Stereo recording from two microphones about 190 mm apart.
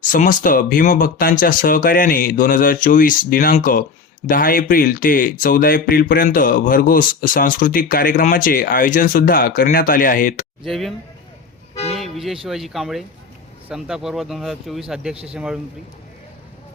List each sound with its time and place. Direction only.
0.0 s speech: 45° left (ahead or behind)
10.6 s speech: centre (ahead or behind)
11.7 s toot: 35° left (ahead or behind)
11.9 s music: centre (ahead or behind)
12.5 s speech: centre (ahead or behind)
15.1 s speech: 30° right (ahead or behind)